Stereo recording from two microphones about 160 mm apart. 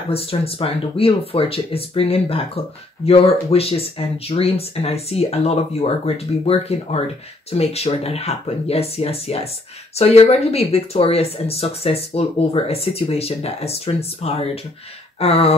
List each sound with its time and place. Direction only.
0.1 s speech: 35° left (ahead or behind)